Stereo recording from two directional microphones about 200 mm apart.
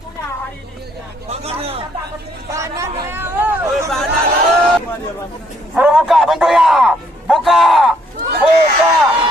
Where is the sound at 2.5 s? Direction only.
15° right (ahead or behind).